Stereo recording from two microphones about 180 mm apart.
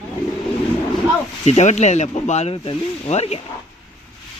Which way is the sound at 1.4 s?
40° left (ahead or behind).